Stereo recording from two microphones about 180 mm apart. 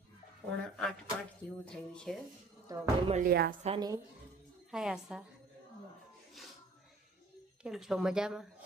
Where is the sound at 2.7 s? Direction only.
20° right (ahead or behind).